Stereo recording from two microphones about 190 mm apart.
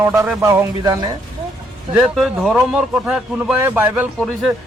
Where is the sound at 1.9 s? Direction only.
5° right (ahead or behind).